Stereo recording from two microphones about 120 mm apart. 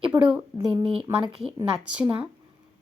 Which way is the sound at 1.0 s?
5° right (ahead or behind).